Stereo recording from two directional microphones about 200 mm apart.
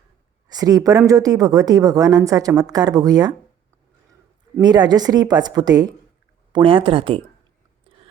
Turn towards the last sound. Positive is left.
turn(degrees=-25)  # may be behind; listen again after turning